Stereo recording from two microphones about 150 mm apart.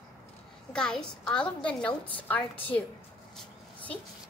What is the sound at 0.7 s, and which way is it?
A woman's voice, 5° left (ahead or behind).